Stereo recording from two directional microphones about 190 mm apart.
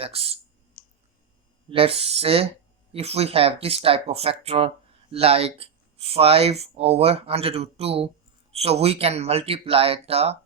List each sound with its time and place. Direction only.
0.0 s speech: 30° right (ahead or behind)
1.7 s speech: 30° right (ahead or behind)